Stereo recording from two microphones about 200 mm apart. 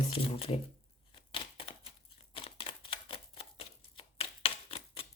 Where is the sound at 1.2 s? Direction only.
25° left (ahead or behind).